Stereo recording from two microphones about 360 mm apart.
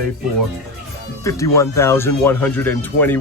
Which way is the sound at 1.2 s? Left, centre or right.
Centre.